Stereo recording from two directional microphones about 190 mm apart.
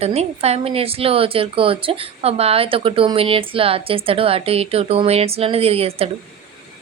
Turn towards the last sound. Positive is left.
turn(degrees=-30)  # may be behind; listen again after turning